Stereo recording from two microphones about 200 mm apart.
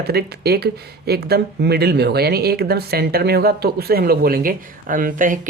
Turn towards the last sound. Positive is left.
turn(degrees=-40)  # may be behind; listen again after turning